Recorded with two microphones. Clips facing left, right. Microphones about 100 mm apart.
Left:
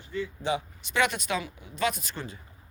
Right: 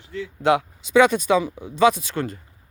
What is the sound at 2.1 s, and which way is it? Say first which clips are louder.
Speech: right 11 dB; 60° right (ahead or behind).